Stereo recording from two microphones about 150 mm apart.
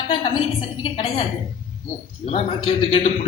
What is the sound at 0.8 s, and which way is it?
Speech, 35° left (ahead or behind).